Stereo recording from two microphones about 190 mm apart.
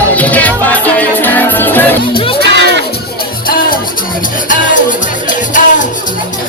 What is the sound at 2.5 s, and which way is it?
Music, 70° right (ahead or behind).